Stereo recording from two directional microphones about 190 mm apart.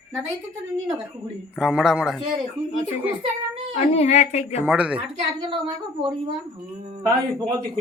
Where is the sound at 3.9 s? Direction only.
35° left (ahead or behind).